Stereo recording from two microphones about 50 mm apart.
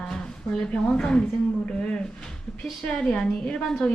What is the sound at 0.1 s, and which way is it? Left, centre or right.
Speech, centre.